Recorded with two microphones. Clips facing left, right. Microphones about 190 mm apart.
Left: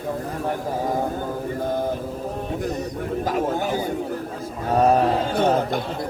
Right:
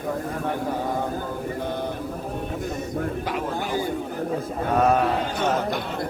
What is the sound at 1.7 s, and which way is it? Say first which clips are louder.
Mantra: left 8 dB; 45° left (ahead or behind).